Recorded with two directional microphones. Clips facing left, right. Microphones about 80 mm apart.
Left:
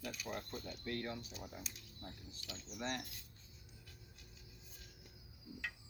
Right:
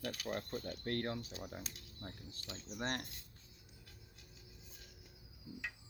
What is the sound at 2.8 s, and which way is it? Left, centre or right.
Speech, right.